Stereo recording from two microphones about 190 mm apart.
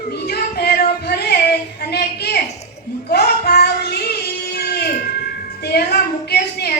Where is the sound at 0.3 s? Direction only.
55° left (ahead or behind).